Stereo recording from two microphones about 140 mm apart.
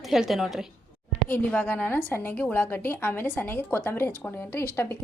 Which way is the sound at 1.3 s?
10° left (ahead or behind).